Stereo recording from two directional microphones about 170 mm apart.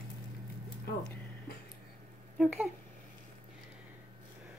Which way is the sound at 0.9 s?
70° left (ahead or behind).